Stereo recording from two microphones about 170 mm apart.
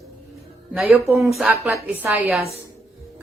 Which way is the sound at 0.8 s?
Centre (ahead or behind).